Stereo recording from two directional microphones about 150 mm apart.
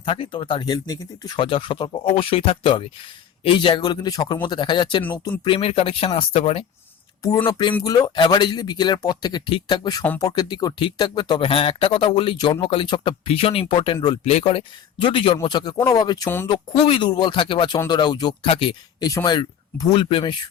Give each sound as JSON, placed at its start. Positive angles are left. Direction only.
{"t": 0.0, "sound": "speech", "side_deg": 35}
{"t": 7.8, "sound": "speech", "side_deg": 25}
{"t": 10.0, "sound": "speech", "side_deg": 20}
{"t": 14.3, "sound": "speech", "side_deg": 40}
{"t": 18.4, "sound": "speech", "side_deg": 40}